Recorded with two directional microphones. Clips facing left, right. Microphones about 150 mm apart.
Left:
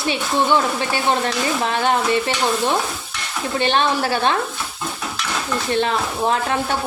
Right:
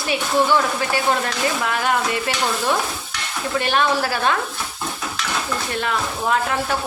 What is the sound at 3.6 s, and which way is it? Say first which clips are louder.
Speech: left 1 dB; 25° left (ahead or behind).